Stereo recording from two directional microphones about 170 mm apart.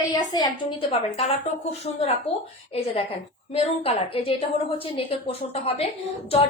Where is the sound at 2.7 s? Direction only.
35° left (ahead or behind).